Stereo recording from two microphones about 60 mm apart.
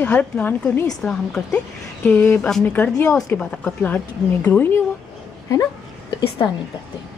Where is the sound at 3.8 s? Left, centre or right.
Left.